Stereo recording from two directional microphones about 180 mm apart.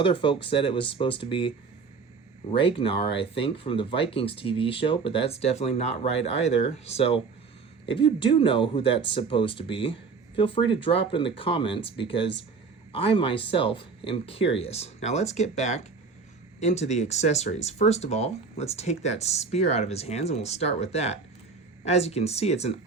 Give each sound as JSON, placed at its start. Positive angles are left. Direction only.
{"t": 0.0, "sound": "speech", "side_deg": 30}